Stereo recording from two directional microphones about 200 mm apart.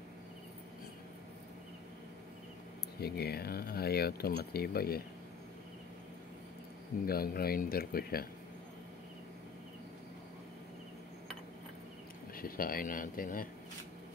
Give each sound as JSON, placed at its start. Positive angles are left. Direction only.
{"t": 3.0, "sound": "speech", "side_deg": 50}
{"t": 7.1, "sound": "speech", "side_deg": 50}
{"t": 12.4, "sound": "speech", "side_deg": 45}